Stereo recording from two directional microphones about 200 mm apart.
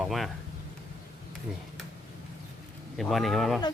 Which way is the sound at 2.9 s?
Centre (ahead or behind).